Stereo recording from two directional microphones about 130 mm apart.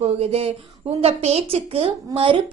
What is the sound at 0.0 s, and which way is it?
A woman's voice, 50° right (ahead or behind).